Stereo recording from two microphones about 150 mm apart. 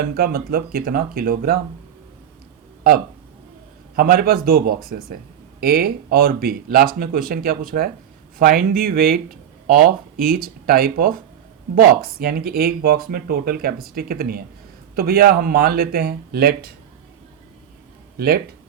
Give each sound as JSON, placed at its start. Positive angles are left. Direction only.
{"t": 0.0, "sound": "speech", "side_deg": -85}
{"t": 3.9, "sound": "speech", "side_deg": -85}
{"t": 18.2, "sound": "speech", "side_deg": -90}